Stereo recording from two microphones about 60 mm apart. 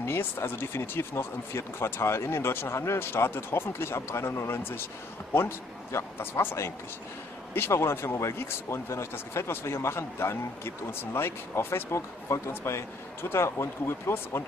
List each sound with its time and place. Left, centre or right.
0.0 s speech: left